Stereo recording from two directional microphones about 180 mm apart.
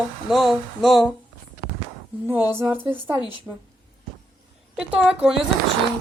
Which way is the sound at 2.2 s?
10° right (ahead or behind).